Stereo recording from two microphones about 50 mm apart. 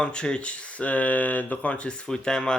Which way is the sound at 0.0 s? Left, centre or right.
Centre.